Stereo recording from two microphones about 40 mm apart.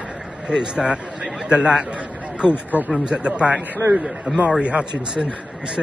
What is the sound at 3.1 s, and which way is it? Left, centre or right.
Speech, right.